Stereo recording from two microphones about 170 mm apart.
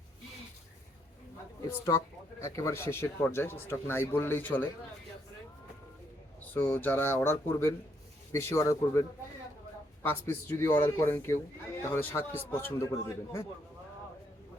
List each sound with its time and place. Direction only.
1.7 s speech: 15° left (ahead or behind)
6.4 s speech: 10° left (ahead or behind)